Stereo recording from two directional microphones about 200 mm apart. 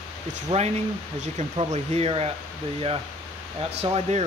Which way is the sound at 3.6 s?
30° right (ahead or behind).